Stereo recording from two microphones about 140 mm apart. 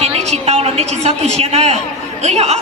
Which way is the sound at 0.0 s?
50° right (ahead or behind).